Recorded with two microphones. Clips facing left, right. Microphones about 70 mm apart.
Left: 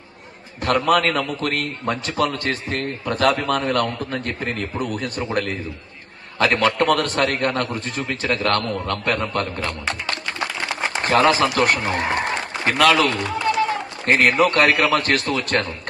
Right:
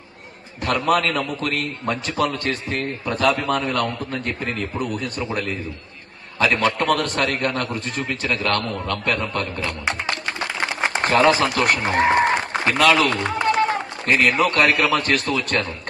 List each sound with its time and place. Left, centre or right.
0.9 s a man's voice: left
6.7 s a man's voice: left
9.8 s music: right
10.6 s a sound: right
11.3 s speech: right
11.7 s applause: right
12.6 s a man's voice: left
13.1 s run: right
14.0 s a man's voice: left